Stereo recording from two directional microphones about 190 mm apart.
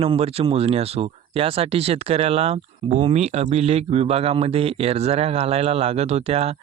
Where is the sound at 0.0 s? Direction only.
30° right (ahead or behind).